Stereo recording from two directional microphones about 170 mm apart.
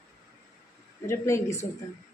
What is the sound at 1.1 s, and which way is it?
Speech, 15° left (ahead or behind).